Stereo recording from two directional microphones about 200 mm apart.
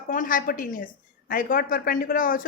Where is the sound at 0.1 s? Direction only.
40° left (ahead or behind).